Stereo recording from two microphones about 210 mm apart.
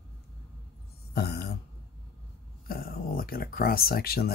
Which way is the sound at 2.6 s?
45° left (ahead or behind).